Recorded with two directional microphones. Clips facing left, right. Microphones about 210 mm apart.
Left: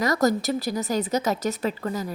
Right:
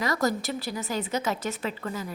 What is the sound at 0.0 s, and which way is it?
Speech, 40° left (ahead or behind).